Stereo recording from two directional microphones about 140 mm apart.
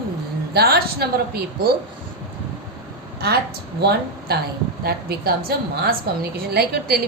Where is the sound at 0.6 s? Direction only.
90° right.